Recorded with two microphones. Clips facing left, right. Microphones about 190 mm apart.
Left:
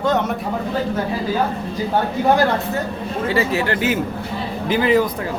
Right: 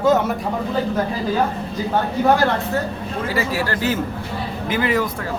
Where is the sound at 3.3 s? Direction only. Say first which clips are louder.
Left 3 dB; 25° left (ahead or behind).